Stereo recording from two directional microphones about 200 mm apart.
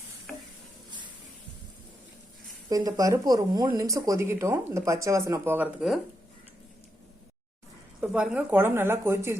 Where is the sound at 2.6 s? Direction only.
20° right (ahead or behind).